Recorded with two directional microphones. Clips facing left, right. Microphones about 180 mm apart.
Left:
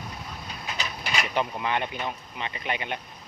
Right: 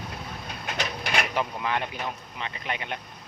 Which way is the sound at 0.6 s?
60° right (ahead or behind).